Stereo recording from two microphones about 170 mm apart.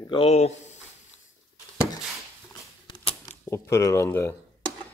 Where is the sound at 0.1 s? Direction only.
35° left (ahead or behind).